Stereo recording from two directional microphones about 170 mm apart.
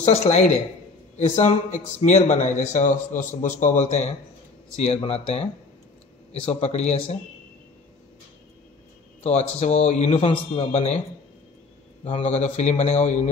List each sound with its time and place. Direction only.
0.0 s a man's voice: 40° left (ahead or behind)
9.2 s a man's voice: 40° left (ahead or behind)
12.0 s a man's voice: 40° left (ahead or behind)